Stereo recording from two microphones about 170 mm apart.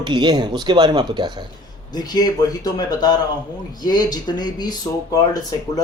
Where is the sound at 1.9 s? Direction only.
25° left (ahead or behind).